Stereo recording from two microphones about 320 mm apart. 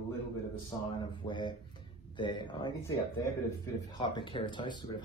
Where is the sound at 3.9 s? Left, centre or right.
Centre.